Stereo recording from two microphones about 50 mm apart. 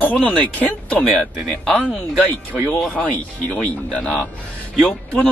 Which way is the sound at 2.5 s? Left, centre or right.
Centre.